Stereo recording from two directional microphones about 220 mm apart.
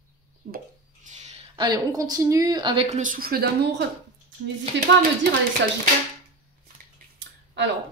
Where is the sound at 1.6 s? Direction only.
20° right (ahead or behind); by 3.8 s 45° right (ahead or behind).